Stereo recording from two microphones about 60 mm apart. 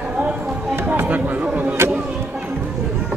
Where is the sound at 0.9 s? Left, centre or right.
Right.